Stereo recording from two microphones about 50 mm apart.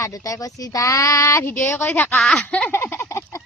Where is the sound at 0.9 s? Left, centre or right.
Left.